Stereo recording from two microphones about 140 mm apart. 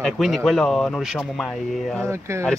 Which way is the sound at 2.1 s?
20° right (ahead or behind).